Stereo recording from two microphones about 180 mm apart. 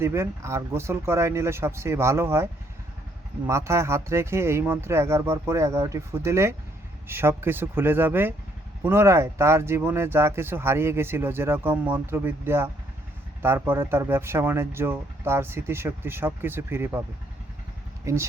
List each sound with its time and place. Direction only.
0.0 s speech: 15° right (ahead or behind)
18.0 s speech: 15° right (ahead or behind)